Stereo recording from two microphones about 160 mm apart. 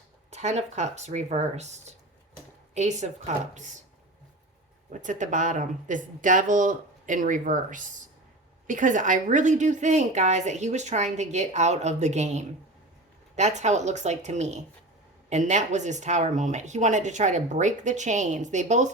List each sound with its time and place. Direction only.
0.3 s a woman's voice: 45° right (ahead or behind)
4.9 s a woman's voice: 50° right (ahead or behind)